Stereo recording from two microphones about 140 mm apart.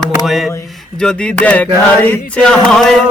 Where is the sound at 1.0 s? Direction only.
5° left (ahead or behind).